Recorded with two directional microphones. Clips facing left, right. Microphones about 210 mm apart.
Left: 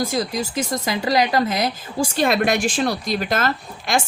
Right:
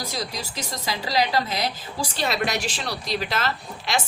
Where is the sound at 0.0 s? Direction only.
50° left (ahead or behind).